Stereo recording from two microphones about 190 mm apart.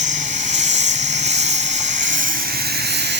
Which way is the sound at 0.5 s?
40° right (ahead or behind).